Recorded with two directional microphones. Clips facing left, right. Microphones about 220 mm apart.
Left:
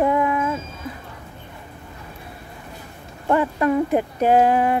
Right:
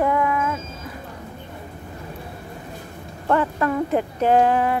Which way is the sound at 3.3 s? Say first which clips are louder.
Left 2 dB; 15° left (ahead or behind).